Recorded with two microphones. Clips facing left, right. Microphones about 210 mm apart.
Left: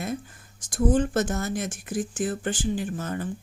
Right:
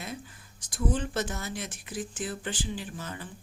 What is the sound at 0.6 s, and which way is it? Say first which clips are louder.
Speech: left 8 dB; 45° left (ahead or behind).